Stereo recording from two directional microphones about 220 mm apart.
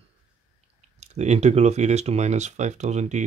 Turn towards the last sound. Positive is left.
turn(degrees=-30)  # may be behind; listen again after turning